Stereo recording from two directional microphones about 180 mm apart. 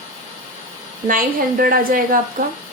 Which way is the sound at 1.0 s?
55° right (ahead or behind).